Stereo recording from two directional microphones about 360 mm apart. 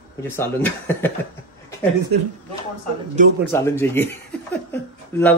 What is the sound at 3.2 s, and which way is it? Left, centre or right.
Speech, right.